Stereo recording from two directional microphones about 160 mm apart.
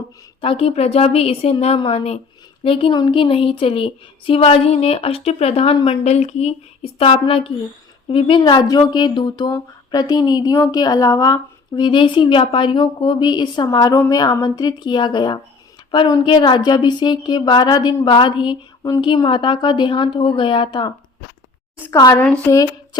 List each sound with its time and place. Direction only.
0.4 s a woman's voice: 35° left (ahead or behind)
21.8 s a woman's voice: 15° left (ahead or behind)